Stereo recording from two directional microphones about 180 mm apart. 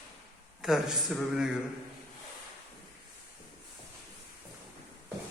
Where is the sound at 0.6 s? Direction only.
5° right (ahead or behind).